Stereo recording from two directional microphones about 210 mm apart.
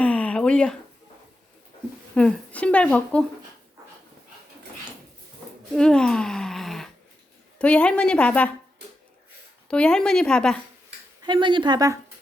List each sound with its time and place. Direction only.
0.0 s a sound: 5° left (ahead or behind)
2.1 s speech: 5° left (ahead or behind)
5.7 s a sound: 5° left (ahead or behind)
7.6 s speech: 5° left (ahead or behind)
9.6 s speech: 5° left (ahead or behind)
11.2 s a woman's voice: 20° right (ahead or behind)